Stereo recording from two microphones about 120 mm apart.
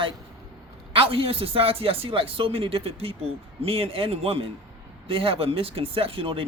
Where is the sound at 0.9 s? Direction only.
50° right (ahead or behind).